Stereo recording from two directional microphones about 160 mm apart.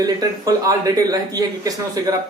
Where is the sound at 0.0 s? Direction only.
20° right (ahead or behind).